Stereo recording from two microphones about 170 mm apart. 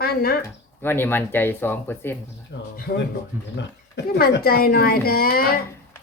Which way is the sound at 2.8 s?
65° left (ahead or behind).